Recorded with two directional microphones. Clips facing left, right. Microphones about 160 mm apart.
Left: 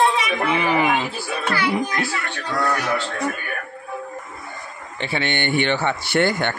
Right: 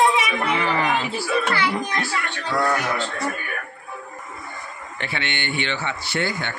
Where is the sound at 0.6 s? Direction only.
15° left (ahead or behind).